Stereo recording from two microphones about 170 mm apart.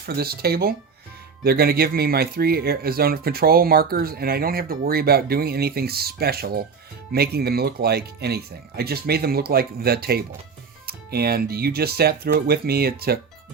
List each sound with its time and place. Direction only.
0.0 s speech: 65° right (ahead or behind)